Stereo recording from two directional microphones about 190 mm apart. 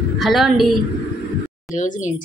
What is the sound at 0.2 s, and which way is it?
Speech, centre (ahead or behind).